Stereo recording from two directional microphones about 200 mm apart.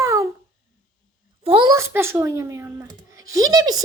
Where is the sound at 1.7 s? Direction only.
10° right (ahead or behind).